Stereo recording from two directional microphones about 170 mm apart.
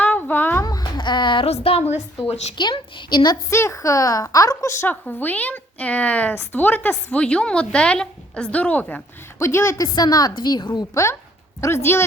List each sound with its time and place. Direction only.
0.0 s a sound: 10° left (ahead or behind); by 1.9 s 35° left (ahead or behind)
2.2 s a woman's voice: 40° left (ahead or behind)
2.6 s a woman's voice: 25° left (ahead or behind)
3.5 s a woman's voice: 15° left (ahead or behind)